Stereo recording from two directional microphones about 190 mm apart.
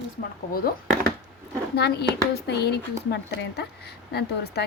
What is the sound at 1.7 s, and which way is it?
A woman's voice, 60° left (ahead or behind).